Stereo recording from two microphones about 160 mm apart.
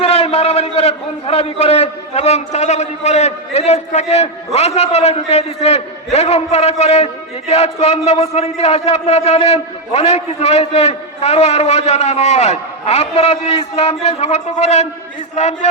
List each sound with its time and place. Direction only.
0.0 s a man's voice: 40° left (ahead or behind)